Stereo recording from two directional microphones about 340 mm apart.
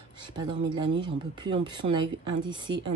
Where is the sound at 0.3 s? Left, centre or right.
Centre.